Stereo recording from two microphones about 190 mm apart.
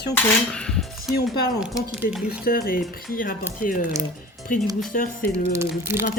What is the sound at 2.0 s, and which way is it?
Speech, 50° left (ahead or behind).